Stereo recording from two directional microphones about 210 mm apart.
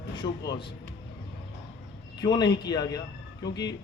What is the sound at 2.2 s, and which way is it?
A man's voice, 20° left (ahead or behind).